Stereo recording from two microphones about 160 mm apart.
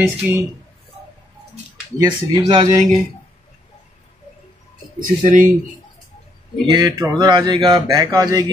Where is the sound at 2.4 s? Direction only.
30° right (ahead or behind).